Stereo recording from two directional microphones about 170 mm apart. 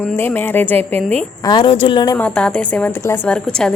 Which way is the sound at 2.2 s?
5° left (ahead or behind).